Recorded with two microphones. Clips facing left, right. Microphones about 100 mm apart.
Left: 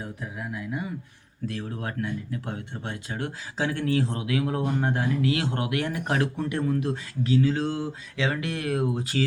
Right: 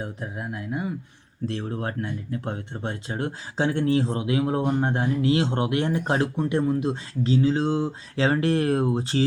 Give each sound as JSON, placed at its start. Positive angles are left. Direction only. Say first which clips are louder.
{"t": 0.0, "sound": "speech", "louder": "right 3 dB", "side_deg": -25}
{"t": 8.1, "sound": "speech", "louder": "right 7 dB", "side_deg": -35}